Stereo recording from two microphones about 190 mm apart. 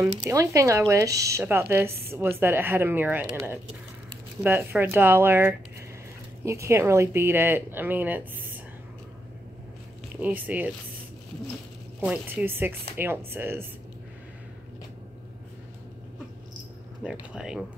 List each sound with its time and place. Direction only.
0.0 s speech: 15° right (ahead or behind)
10.2 s speech: 10° right (ahead or behind)
12.0 s speech: 5° right (ahead or behind)
17.0 s speech: 5° right (ahead or behind)